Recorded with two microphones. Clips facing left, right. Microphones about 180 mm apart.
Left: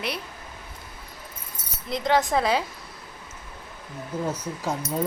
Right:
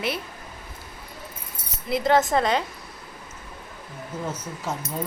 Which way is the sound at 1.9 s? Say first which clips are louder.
Right 2 dB; 5° right (ahead or behind).